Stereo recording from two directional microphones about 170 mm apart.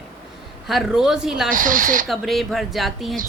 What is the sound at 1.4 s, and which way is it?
Speech, 55° right (ahead or behind).